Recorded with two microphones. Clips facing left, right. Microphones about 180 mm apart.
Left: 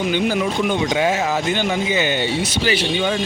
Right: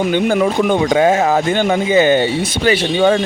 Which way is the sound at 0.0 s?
50° right (ahead or behind).